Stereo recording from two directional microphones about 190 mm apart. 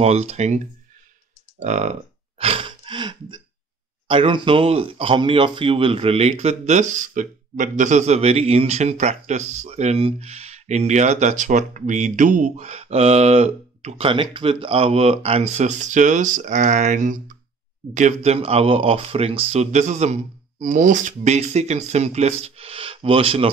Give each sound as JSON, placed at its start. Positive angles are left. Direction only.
{"t": 0.0, "sound": "speech", "side_deg": -35}
{"t": 1.6, "sound": "a sound", "side_deg": -35}
{"t": 4.1, "sound": "speech", "side_deg": -30}